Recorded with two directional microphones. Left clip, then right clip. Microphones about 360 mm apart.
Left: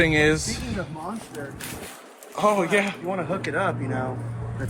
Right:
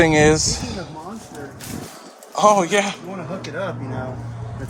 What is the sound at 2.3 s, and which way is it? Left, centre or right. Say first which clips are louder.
Speech: right 6 dB; centre.